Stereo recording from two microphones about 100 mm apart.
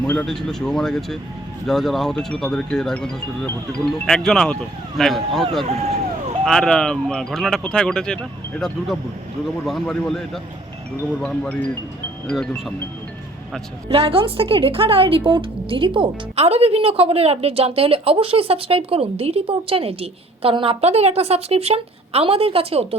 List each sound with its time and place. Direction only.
0.1 s speech: 5° left (ahead or behind)
12.3 s speech: centre (ahead or behind)
13.9 s a woman's voice: 70° right (ahead or behind)